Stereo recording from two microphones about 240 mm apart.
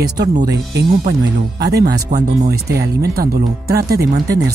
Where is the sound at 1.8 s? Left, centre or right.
Right.